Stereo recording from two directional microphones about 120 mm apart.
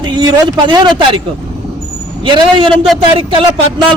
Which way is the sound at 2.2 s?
45° right (ahead or behind).